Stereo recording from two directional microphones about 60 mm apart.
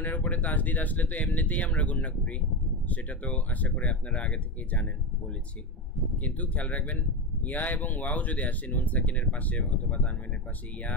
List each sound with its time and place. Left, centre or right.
0.0 s speech: left
6.2 s speech: left